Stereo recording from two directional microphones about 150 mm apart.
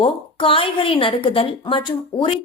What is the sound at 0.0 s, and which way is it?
A woman's voice, 35° left (ahead or behind).